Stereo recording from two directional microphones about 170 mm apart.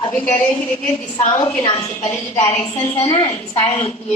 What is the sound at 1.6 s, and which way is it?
A woman's voice, 35° left (ahead or behind).